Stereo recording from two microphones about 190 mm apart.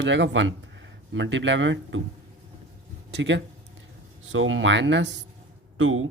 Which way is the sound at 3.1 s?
70° right (ahead or behind).